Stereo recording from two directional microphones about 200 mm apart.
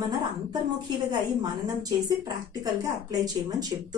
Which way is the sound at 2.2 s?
20° right (ahead or behind).